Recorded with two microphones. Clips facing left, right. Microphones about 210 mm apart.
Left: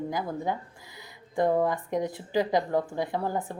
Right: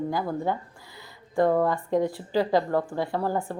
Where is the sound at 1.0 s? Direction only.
20° left (ahead or behind).